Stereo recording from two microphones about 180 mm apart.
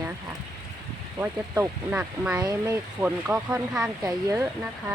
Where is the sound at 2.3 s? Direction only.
20° right (ahead or behind).